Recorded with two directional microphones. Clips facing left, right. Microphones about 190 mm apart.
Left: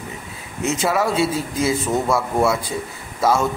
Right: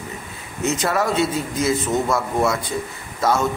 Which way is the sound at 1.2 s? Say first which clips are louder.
Left 1 dB; 30° left (ahead or behind).